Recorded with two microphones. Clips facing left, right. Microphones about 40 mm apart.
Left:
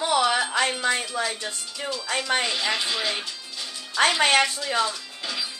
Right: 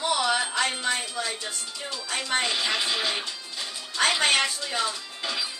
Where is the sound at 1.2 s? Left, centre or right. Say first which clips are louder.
Left 3 dB; centre.